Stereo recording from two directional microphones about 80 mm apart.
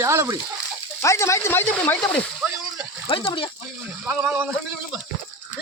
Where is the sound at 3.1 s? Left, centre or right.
Left.